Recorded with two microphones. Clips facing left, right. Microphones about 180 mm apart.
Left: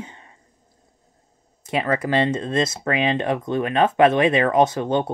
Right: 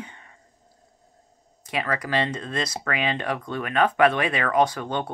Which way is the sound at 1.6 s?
25° left (ahead or behind).